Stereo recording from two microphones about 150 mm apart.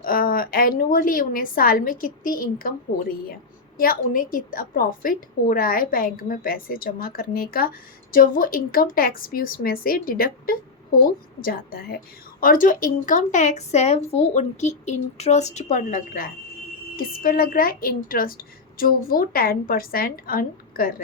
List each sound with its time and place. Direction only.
0.0 s a woman's voice: 75° left (ahead or behind)
12.4 s a woman's voice: 65° left (ahead or behind)
17.0 s a woman's voice: 75° left (ahead or behind)